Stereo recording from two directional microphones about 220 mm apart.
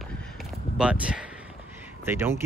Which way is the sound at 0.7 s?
5° right (ahead or behind).